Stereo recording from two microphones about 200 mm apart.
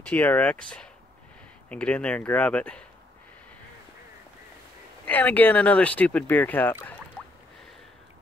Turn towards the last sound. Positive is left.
turn(degrees=10)  # may be behind; listen again after turning